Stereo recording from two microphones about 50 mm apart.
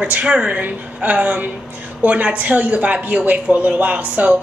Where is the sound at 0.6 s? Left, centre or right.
Right.